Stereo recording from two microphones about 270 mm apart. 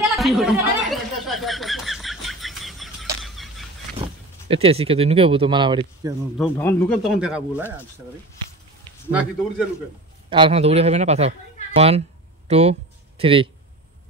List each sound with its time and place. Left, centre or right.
0.1 s snicker: centre
3.2 s fowl: centre
4.5 s speech: right
6.3 s speech: centre
10.3 s speech: centre